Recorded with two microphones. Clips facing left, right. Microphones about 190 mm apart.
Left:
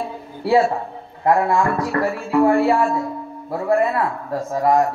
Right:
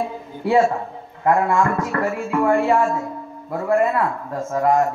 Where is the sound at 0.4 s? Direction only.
35° left (ahead or behind).